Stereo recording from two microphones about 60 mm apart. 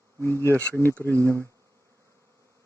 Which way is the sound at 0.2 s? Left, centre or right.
Left.